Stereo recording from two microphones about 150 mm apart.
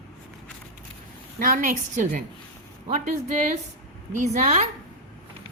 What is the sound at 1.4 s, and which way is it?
Speech, 65° right (ahead or behind).